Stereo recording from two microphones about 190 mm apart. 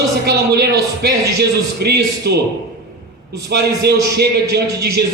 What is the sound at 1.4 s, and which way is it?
A man's voice, 60° right (ahead or behind).